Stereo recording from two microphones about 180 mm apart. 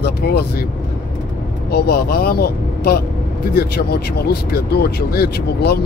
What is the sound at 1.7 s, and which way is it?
Speech, 60° left (ahead or behind).